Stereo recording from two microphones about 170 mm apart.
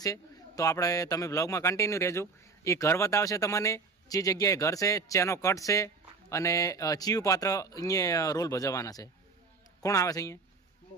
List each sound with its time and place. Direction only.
0.0 s a man's voice: 20° left (ahead or behind)